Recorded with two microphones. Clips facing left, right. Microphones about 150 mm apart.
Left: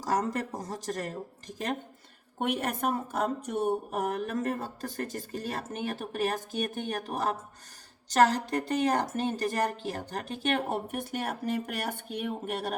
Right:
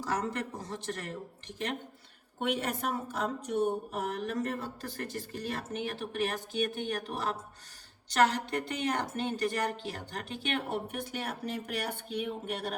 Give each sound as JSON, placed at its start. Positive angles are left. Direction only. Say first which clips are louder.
{"t": 0.0, "sound": "speech", "louder": "left 4 dB", "side_deg": 40}
{"t": 2.4, "sound": "speech", "louder": "left 2 dB", "side_deg": 50}